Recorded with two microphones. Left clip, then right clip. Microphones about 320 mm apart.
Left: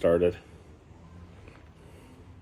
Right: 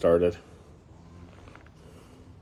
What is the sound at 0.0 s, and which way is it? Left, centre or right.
Speech, centre.